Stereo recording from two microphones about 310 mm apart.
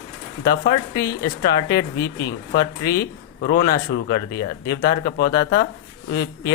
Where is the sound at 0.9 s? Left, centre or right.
Centre.